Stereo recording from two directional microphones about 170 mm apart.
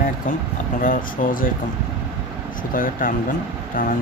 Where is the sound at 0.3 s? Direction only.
50° left (ahead or behind).